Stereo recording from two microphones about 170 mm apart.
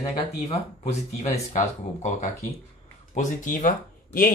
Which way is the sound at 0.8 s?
40° left (ahead or behind).